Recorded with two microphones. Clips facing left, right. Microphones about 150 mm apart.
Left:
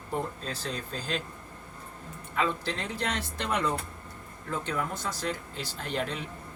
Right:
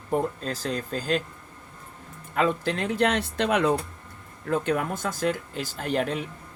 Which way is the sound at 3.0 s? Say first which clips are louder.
Right 10 dB; 75° right (ahead or behind).